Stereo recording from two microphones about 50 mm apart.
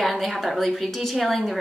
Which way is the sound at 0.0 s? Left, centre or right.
Centre.